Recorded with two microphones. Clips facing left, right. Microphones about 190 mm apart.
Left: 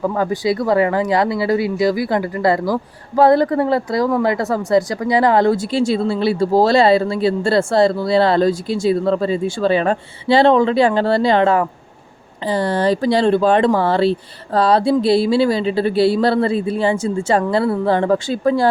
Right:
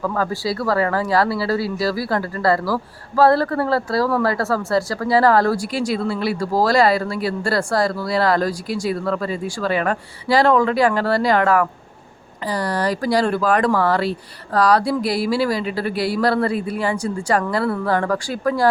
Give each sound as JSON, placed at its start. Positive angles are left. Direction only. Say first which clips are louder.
{"t": 0.0, "sound": "speech", "louder": "left 4 dB", "side_deg": 20}